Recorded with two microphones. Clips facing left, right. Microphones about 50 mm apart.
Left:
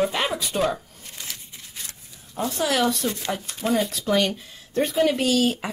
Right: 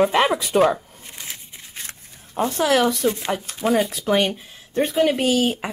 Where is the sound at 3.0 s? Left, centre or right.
Right.